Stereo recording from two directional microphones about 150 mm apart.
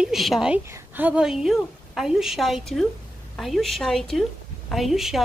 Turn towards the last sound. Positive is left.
turn(degrees=0)  # may be behind; listen again after turning